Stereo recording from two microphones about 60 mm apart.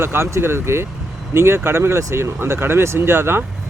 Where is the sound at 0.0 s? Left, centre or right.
Right.